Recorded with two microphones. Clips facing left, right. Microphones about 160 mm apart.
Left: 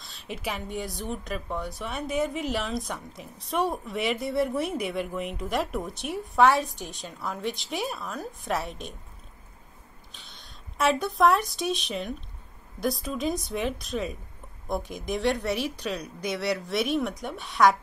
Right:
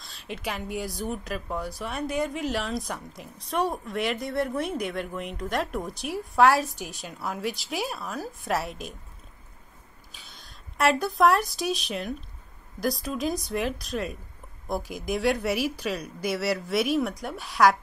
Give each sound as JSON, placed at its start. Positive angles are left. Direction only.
{"t": 0.0, "sound": "speech", "side_deg": 0}
{"t": 10.1, "sound": "speech", "side_deg": -5}